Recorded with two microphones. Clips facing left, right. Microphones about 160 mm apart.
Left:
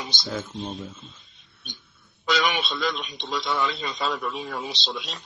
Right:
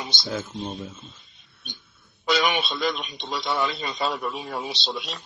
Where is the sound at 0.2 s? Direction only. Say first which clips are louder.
Right 1 dB; 5° right (ahead or behind).